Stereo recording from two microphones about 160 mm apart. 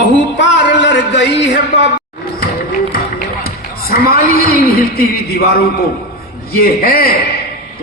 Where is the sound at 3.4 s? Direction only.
70° left (ahead or behind).